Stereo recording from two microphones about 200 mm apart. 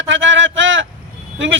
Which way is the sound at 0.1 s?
65° right (ahead or behind).